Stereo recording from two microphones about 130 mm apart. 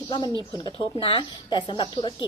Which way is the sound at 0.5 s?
35° left (ahead or behind).